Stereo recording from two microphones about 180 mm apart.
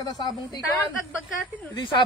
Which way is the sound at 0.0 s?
25° left (ahead or behind).